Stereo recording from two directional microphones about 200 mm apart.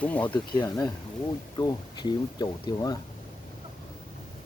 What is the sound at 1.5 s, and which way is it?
Speech, 20° left (ahead or behind).